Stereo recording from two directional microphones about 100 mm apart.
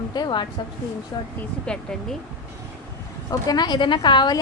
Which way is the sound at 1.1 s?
35° left (ahead or behind).